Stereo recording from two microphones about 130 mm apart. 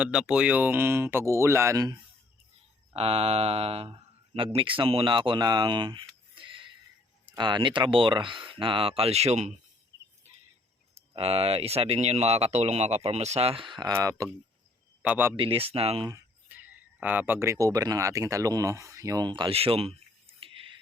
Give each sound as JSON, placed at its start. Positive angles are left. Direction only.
{"t": 0.0, "sound": "speech", "side_deg": -5}
{"t": 2.9, "sound": "speech", "side_deg": -50}
{"t": 6.3, "sound": "a sound", "side_deg": -40}
{"t": 7.3, "sound": "speech", "side_deg": -35}
{"t": 10.9, "sound": "speech", "side_deg": -50}
{"t": 15.0, "sound": "speech", "side_deg": -15}
{"t": 15.4, "sound": "speech", "side_deg": -45}
{"t": 16.5, "sound": "speech", "side_deg": -15}